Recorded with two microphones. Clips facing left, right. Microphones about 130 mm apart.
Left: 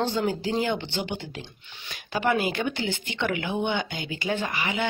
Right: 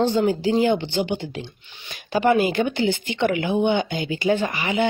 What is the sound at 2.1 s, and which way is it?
Speech, 30° right (ahead or behind).